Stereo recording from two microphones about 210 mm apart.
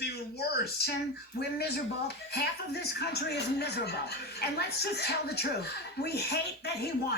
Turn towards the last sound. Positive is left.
turn(degrees=50)  # may be behind; listen again after turning